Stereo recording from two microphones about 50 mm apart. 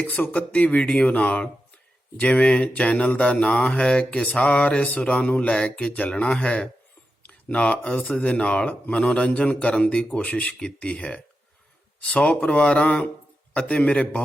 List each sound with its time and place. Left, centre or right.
0.1 s a man's voice: left
1.0 s a man's voice: left
7.2 s a sound: left
7.9 s a man's voice: left